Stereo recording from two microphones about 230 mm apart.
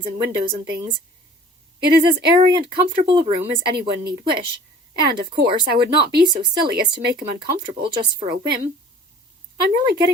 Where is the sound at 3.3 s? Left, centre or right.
Right.